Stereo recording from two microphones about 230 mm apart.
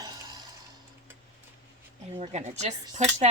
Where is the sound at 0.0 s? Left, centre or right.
Centre.